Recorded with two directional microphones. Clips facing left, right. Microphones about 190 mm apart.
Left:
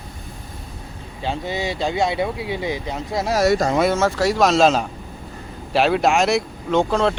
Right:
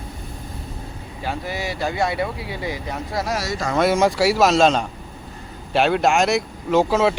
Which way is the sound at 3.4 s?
55° left (ahead or behind).